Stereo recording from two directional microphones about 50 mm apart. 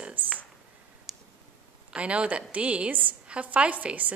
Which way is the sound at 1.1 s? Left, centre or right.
Centre.